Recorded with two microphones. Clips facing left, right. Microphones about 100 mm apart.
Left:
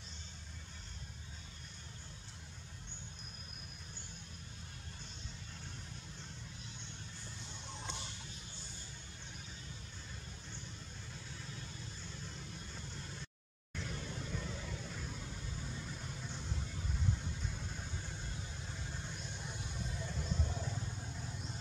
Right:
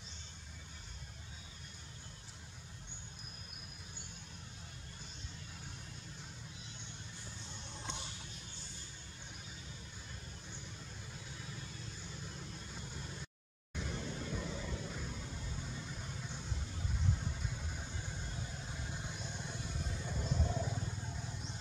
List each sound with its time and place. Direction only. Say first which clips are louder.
12.0 s vehicle: right 1 dB; 10° right (ahead or behind)
20.1 s music: right 5 dB; 10° right (ahead or behind)